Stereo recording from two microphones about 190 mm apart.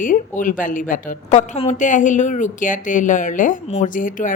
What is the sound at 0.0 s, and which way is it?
Speech, 45° left (ahead or behind).